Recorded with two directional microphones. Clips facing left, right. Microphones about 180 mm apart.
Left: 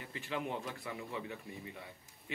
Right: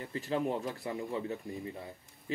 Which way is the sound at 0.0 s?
40° right (ahead or behind).